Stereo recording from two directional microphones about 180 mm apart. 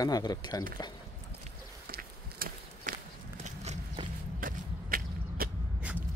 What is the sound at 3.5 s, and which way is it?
Clip-clop, 40° right (ahead or behind).